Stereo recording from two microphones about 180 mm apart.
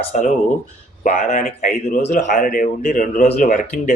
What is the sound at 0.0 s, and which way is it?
Speech, 40° left (ahead or behind).